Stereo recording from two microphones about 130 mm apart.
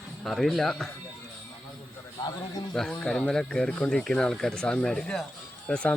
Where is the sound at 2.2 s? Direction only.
30° left (ahead or behind).